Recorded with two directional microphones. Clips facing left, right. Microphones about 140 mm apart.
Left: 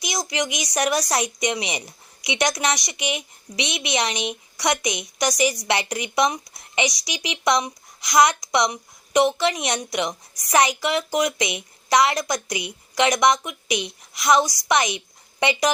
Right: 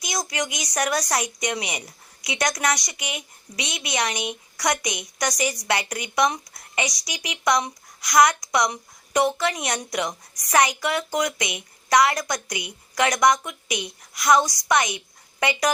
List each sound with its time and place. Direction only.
0.1 s a woman's voice: 20° left (ahead or behind)